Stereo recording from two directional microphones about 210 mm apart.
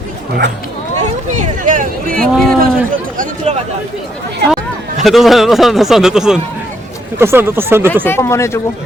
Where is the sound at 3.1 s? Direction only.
35° right (ahead or behind).